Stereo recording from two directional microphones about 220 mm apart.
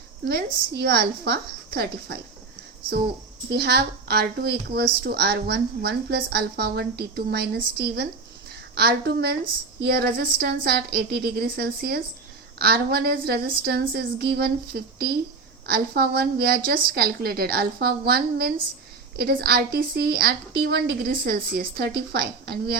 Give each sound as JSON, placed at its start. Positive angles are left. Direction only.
{"t": 0.3, "sound": "a woman's voice", "side_deg": -45}
{"t": 3.5, "sound": "a woman's voice", "side_deg": -45}